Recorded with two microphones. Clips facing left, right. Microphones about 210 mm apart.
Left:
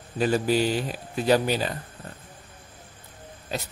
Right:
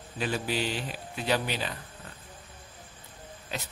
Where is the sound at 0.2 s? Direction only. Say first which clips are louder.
Left 8 dB; 40° left (ahead or behind).